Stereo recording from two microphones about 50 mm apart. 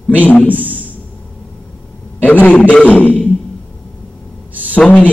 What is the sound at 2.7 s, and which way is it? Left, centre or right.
Wild animals, left.